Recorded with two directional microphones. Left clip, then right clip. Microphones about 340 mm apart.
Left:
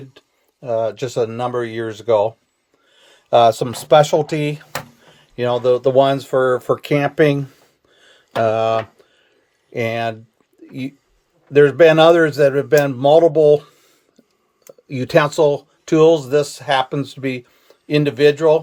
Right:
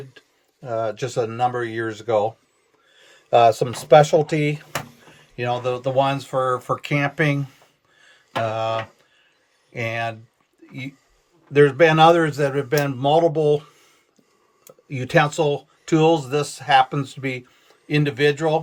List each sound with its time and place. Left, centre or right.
0.1 s speech: left
7.9 s music: left
9.7 s speech: centre
11.5 s speech: centre
14.8 s speech: centre